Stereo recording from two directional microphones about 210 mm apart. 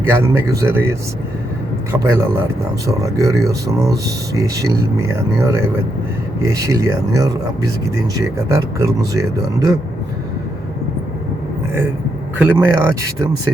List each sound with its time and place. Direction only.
0.1 s speech: 10° right (ahead or behind)
12.4 s speech: 10° right (ahead or behind)